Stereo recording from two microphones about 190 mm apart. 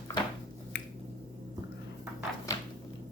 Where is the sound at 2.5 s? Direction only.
15° left (ahead or behind).